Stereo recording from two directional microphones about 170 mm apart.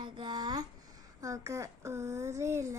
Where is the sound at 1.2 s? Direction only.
20° right (ahead or behind).